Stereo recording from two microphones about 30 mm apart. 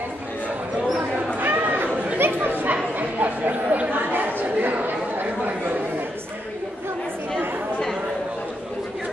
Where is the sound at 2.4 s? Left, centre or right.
Right.